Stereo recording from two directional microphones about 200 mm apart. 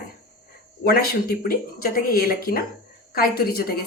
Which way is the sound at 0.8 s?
50° left (ahead or behind).